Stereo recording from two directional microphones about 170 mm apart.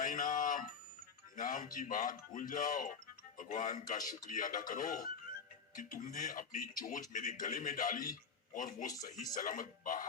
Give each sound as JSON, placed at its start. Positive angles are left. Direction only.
{"t": 0.0, "sound": "music", "side_deg": 50}
{"t": 1.4, "sound": "speech", "side_deg": 55}